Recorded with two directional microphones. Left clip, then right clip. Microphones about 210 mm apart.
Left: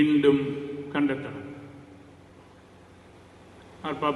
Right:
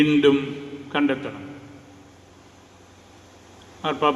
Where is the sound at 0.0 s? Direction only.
40° right (ahead or behind).